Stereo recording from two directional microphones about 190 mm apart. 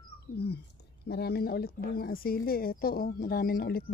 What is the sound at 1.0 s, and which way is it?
Speech, 60° left (ahead or behind).